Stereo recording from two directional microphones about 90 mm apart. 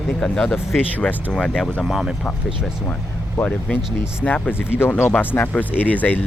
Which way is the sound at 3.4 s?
10° left (ahead or behind).